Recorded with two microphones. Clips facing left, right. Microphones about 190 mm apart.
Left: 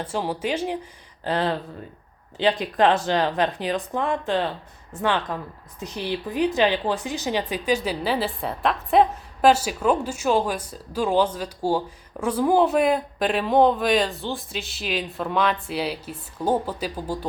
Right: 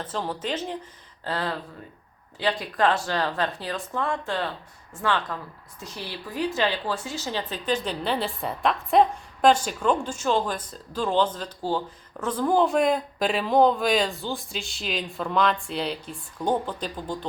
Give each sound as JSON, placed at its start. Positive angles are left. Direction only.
{"t": 0.0, "sound": "a woman's voice", "side_deg": 10}